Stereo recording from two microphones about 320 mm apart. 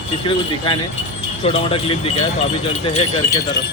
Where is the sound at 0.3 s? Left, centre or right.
Centre.